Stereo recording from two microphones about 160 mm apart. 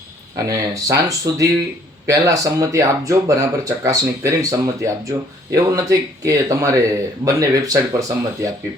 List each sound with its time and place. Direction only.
0.3 s speech: 20° right (ahead or behind)